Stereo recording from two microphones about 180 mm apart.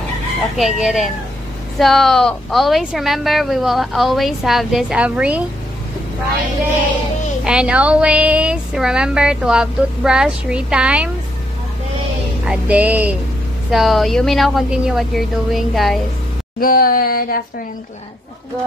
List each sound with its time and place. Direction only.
0.6 s speech: centre (ahead or behind)
7.4 s speech: 5° right (ahead or behind)
12.4 s music: 10° right (ahead or behind)
13.7 s speech: centre (ahead or behind)
16.5 s a sound: 55° left (ahead or behind)